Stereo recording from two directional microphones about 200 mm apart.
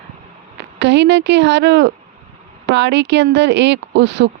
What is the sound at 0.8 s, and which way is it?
Speech, 60° right (ahead or behind).